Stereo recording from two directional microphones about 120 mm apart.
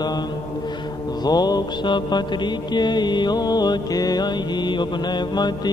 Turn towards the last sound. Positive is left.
turn(degrees=35)  # may be behind; listen again after turning